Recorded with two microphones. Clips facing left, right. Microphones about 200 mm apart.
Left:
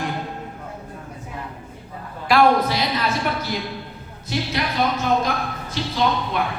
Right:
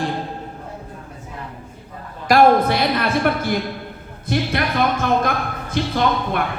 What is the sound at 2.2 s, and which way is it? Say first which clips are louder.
A woman's voice: right 3 dB; 45° right (ahead or behind).